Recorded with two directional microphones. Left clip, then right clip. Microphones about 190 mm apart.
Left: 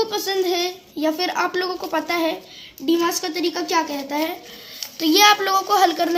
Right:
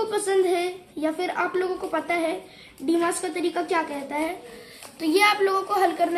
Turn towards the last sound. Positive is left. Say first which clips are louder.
# left 5 dB
turn(degrees=45)  # may be behind; listen again after turning